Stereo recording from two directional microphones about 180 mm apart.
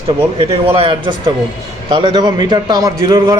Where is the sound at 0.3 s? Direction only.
30° right (ahead or behind).